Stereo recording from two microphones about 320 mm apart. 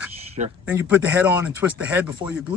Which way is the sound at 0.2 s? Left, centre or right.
Right.